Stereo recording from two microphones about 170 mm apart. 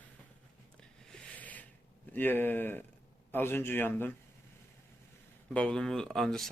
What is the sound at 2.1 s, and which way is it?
Speech, 10° left (ahead or behind).